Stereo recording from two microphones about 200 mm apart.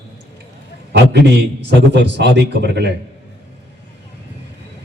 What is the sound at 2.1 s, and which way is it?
Speech, 60° right (ahead or behind).